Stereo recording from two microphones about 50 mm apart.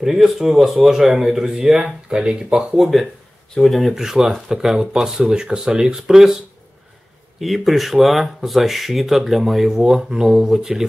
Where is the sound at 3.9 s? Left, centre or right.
Centre.